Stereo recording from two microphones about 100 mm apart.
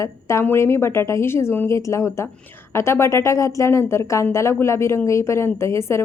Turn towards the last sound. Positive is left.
turn(degrees=25)  # may be behind; listen again after turning